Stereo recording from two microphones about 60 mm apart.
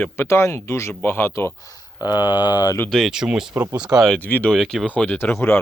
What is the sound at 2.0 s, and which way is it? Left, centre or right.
Speech, left.